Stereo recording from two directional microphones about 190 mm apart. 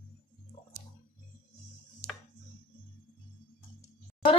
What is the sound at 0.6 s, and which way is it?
Tick-tock, 40° left (ahead or behind).